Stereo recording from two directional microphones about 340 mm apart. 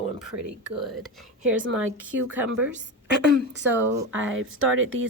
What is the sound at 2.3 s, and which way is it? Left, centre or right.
Speech, centre.